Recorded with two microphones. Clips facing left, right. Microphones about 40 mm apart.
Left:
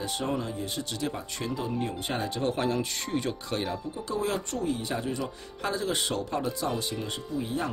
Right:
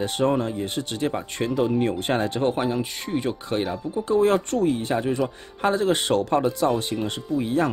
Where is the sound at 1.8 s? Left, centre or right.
Right.